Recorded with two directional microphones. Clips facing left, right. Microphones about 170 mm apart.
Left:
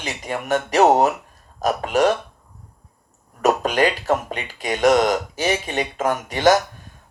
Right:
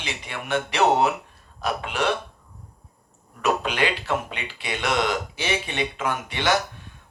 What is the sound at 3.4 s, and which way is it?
Speech, 40° left (ahead or behind).